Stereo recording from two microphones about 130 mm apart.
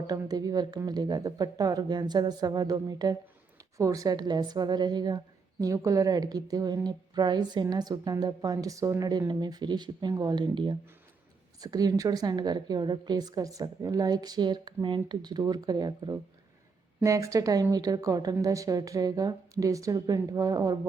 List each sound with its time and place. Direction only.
0.1 s a woman's voice: 30° right (ahead or behind)